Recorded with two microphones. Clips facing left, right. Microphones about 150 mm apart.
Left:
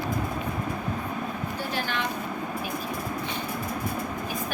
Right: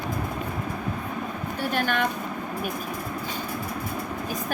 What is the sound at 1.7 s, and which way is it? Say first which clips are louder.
Vehicle: right 6 dB; 50° right (ahead or behind).